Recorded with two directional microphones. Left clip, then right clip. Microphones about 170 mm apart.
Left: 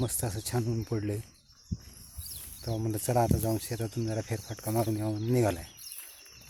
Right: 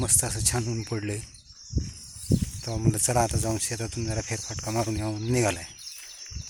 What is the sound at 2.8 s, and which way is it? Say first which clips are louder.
Speech: right 3 dB; 5° right (ahead or behind).